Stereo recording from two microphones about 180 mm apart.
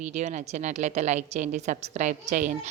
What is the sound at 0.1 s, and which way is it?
A woman's voice, 40° right (ahead or behind).